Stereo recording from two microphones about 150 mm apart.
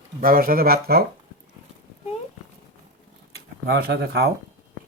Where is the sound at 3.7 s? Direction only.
90° right.